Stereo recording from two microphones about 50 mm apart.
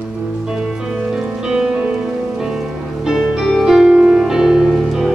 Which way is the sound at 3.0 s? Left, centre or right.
Centre.